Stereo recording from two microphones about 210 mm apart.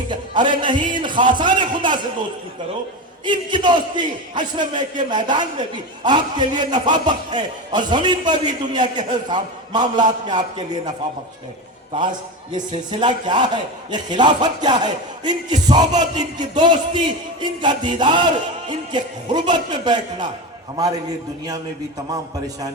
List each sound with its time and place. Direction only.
0.1 s music: 20° right (ahead or behind)
0.6 s a man's voice: 20° right (ahead or behind)
3.2 s a man's voice: 20° right (ahead or behind)
12.5 s a man's voice: 20° right (ahead or behind)